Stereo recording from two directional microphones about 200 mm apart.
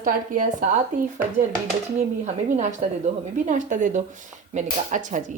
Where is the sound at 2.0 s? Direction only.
35° right (ahead or behind).